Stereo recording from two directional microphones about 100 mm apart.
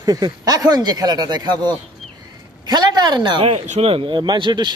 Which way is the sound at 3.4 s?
90° right.